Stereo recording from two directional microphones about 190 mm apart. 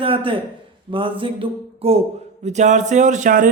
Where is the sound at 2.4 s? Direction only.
40° right (ahead or behind).